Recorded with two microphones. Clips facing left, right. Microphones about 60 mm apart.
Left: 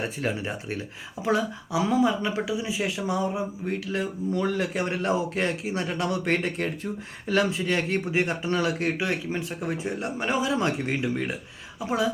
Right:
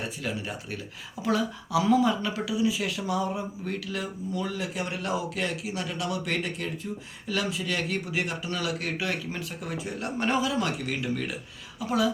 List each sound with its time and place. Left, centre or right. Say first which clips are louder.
0.0 s speech: left 4 dB; left
4.3 s speech: left 6 dB; left